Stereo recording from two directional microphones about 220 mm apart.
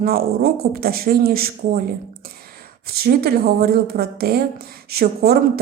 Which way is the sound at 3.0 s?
45° right (ahead or behind).